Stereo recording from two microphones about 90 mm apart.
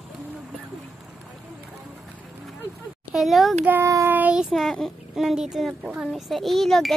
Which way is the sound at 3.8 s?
35° right (ahead or behind).